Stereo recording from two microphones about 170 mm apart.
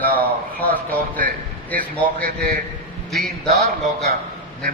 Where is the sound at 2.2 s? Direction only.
60° right (ahead or behind).